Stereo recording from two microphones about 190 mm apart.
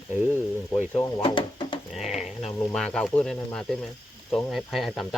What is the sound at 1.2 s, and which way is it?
Speech, 25° left (ahead or behind).